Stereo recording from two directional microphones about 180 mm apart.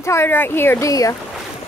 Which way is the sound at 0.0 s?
15° left (ahead or behind).